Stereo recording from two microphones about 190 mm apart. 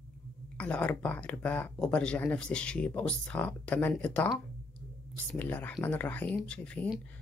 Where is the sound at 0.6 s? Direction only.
5° left (ahead or behind).